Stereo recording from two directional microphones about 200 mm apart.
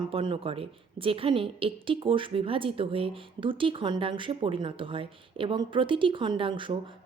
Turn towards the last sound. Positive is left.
turn(degrees=-25)  # may be behind; listen again after turning